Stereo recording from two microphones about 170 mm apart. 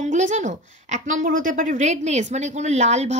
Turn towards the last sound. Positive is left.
turn(degrees=-40)  # may be behind; listen again after turning